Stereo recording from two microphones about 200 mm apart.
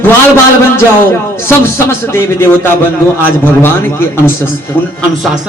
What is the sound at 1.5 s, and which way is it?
A man's voice, 10° left (ahead or behind).